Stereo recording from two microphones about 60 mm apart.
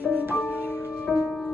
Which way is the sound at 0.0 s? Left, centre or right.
Right.